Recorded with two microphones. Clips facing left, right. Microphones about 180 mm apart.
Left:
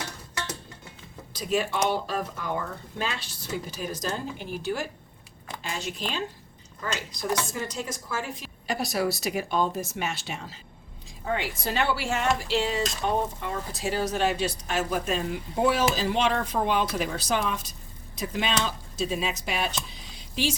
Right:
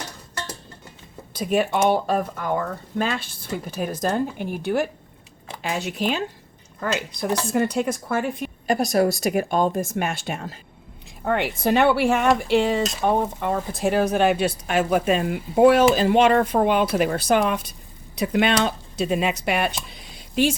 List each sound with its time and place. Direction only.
1.3 s a woman's voice: 55° right (ahead or behind)